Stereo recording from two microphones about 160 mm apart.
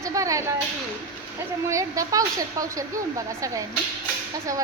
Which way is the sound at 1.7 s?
20° right (ahead or behind).